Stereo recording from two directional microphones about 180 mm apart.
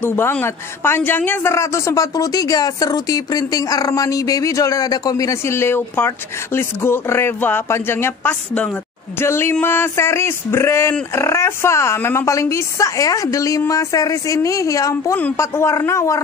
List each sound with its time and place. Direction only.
0.0 s speech: 10° left (ahead or behind)